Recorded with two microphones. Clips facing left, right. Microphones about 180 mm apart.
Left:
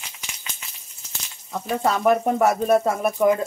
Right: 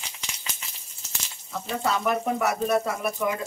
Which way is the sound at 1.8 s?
30° left (ahead or behind).